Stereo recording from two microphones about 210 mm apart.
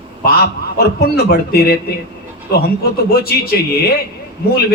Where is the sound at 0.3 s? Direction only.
50° left (ahead or behind).